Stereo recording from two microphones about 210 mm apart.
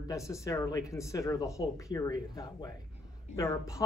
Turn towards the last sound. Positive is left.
turn(degrees=15)  # may be behind; listen again after turning